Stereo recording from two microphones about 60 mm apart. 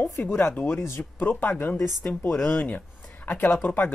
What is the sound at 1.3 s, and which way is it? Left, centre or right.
Speech, left.